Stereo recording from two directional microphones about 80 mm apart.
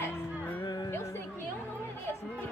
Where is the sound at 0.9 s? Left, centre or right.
Left.